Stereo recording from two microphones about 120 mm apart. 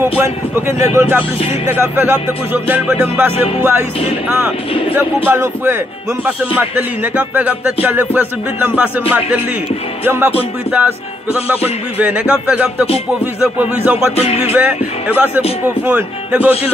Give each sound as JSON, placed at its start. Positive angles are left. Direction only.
{"t": 0.2, "sound": "speech", "side_deg": -20}
{"t": 0.9, "sound": "music", "side_deg": -15}
{"t": 4.9, "sound": "speech", "side_deg": -20}
{"t": 6.2, "sound": "music", "side_deg": -15}
{"t": 10.0, "sound": "music", "side_deg": -15}
{"t": 11.3, "sound": "music", "side_deg": -15}
{"t": 14.1, "sound": "music", "side_deg": 55}
{"t": 14.5, "sound": "music", "side_deg": -10}